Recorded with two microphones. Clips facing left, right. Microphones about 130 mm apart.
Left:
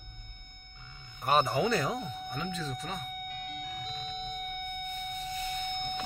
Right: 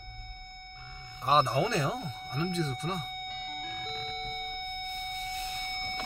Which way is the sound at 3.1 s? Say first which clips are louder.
Right 1 dB; 5° left (ahead or behind).